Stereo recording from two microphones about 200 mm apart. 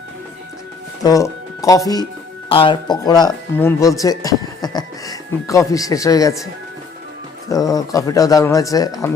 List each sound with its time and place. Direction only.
1.0 s speech: 15° left (ahead or behind)
7.5 s speech: 15° left (ahead or behind)